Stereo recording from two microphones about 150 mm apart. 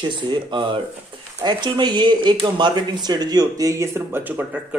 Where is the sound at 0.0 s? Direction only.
30° right (ahead or behind).